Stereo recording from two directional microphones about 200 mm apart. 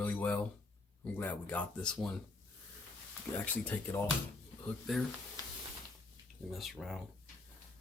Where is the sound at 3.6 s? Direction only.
10° left (ahead or behind).